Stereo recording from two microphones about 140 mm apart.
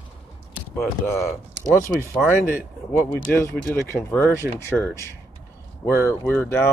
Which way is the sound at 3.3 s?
15° left (ahead or behind).